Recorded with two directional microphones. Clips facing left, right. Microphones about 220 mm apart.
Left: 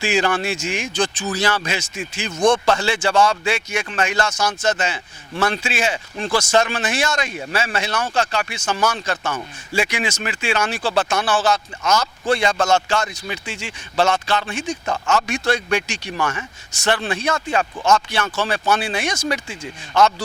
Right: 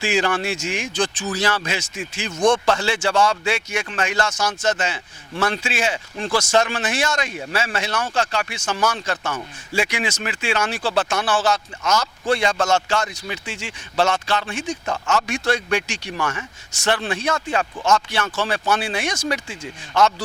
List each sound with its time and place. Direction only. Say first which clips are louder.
0.0 s speech: left 1 dB; 15° left (ahead or behind)
11.8 s speech: left 2 dB; 25° left (ahead or behind)
12.3 s speech: left 1 dB; 15° left (ahead or behind)